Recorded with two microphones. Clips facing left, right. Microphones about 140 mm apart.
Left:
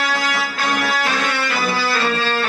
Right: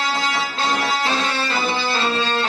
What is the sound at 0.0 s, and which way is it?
Music, 25° right (ahead or behind).